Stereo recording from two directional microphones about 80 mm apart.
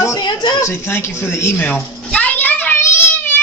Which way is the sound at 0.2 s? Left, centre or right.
Left.